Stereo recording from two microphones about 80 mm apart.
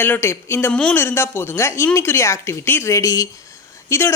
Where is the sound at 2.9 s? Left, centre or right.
Left.